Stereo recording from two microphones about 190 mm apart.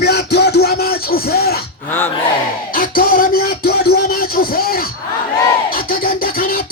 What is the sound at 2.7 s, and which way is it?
Music, 50° left (ahead or behind).